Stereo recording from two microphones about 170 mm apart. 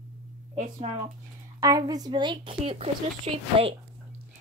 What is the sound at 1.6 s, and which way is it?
A woman's voice, 20° right (ahead or behind).